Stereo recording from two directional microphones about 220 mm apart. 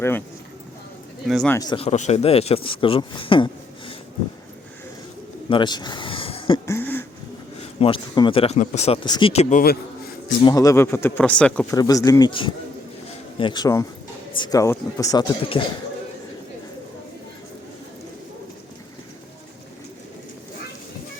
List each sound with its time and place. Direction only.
1.3 s speech: centre (ahead or behind)
1.5 s speech: 20° left (ahead or behind)
5.5 s a sound: 20° left (ahead or behind)
6.7 s a sound: 10° left (ahead or behind)
7.8 s speech: 25° left (ahead or behind)
10.4 s speech: 15° left (ahead or behind)